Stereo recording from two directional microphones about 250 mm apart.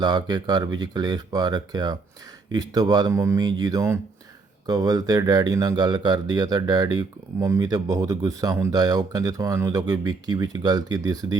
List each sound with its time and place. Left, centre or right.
0.0 s speech: centre